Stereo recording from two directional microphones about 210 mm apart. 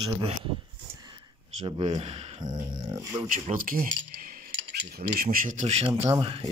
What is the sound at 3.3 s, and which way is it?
Speech, 40° right (ahead or behind).